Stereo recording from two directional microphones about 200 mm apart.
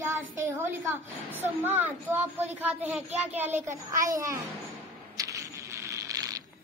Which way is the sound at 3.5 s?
35° right (ahead or behind).